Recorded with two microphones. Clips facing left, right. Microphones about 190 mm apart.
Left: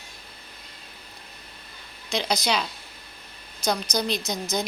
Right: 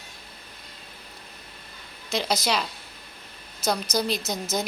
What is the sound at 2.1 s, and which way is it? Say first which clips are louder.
A woman's voice: even; 5° right (ahead or behind).